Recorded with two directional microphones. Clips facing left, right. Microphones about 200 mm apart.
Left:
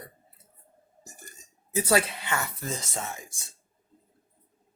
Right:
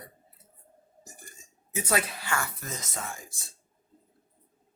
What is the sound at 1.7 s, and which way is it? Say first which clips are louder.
Speech: left 5 dB; 30° left (ahead or behind).